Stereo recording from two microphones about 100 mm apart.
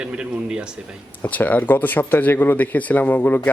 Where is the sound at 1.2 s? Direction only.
15° left (ahead or behind).